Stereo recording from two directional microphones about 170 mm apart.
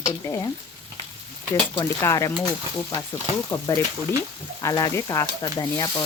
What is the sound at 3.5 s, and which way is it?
Speech, 15° left (ahead or behind).